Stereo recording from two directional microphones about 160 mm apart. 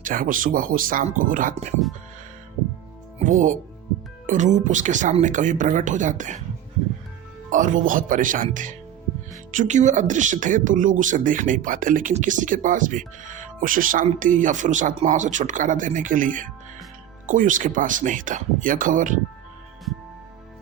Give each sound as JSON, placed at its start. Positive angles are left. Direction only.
{"t": 0.0, "sound": "speech", "side_deg": -60}
{"t": 3.2, "sound": "speech", "side_deg": -50}
{"t": 7.5, "sound": "speech", "side_deg": -55}